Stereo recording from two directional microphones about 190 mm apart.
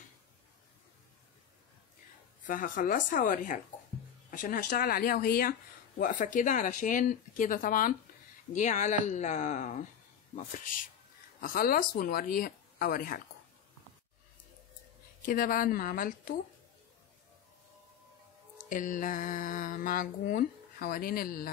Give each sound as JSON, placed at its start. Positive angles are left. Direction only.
{"t": 2.4, "sound": "a woman's voice", "side_deg": 45}
{"t": 15.2, "sound": "speech", "side_deg": 50}
{"t": 18.7, "sound": "speech", "side_deg": 45}